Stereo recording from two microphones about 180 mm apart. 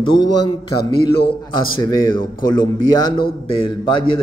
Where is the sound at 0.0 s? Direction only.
25° left (ahead or behind).